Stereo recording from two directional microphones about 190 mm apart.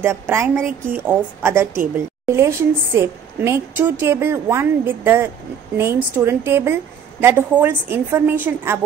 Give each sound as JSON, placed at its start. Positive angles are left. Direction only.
{"t": 0.0, "sound": "a woman's voice", "side_deg": -15}